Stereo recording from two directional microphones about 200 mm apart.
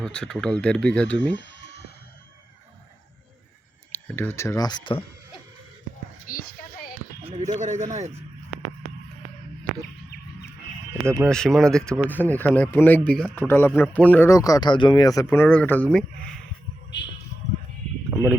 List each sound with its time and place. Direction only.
0.0 s speech: 5° left (ahead or behind)
4.1 s speech: 10° left (ahead or behind)
6.2 s a sound: 45° left (ahead or behind)
7.3 s speech: 35° right (ahead or behind)
11.0 s speech: 15° right (ahead or behind)
11.3 s speech: 5° left (ahead or behind)
18.1 s speech: centre (ahead or behind)